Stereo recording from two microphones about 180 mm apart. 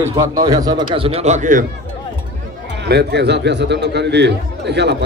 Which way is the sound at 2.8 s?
65° right (ahead or behind).